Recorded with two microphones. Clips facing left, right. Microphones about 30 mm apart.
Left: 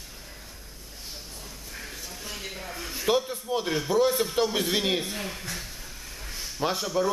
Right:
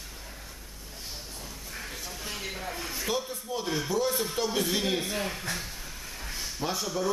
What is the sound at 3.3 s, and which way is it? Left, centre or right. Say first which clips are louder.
Speech: left 4 dB; left.